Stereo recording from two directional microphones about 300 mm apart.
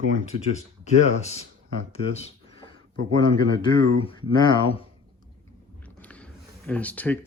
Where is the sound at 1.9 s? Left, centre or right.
Centre.